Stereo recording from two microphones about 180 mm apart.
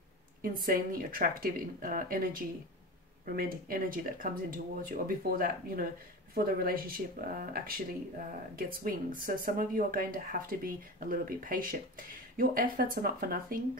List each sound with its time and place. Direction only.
0.4 s speech: 55° right (ahead or behind)